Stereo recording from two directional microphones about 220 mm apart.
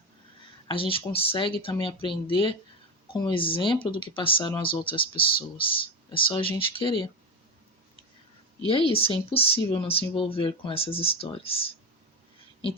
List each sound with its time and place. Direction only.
0.7 s speech: 25° left (ahead or behind)
8.9 s speech: 25° left (ahead or behind)